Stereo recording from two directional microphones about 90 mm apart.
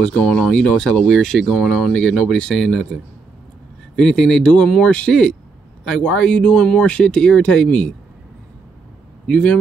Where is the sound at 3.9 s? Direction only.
5° left (ahead or behind).